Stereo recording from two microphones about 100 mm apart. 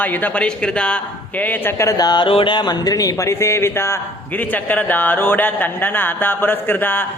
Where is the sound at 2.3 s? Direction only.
55° left (ahead or behind).